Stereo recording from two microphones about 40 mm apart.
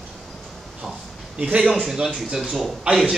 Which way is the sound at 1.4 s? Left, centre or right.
Right.